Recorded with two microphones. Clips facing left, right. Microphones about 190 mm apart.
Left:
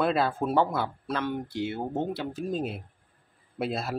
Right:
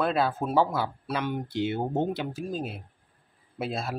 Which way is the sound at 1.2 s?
20° right (ahead or behind).